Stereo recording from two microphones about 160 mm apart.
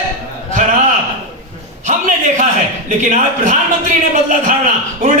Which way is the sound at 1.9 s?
50° right (ahead or behind).